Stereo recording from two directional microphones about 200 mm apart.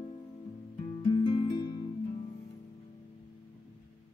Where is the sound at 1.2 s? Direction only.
25° left (ahead or behind).